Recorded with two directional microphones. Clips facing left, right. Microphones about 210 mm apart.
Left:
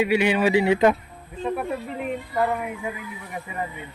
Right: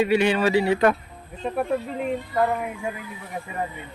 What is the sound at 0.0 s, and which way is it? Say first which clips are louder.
Speech: even; 10° left (ahead or behind).